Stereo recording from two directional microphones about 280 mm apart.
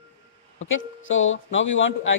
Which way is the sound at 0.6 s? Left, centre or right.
Left.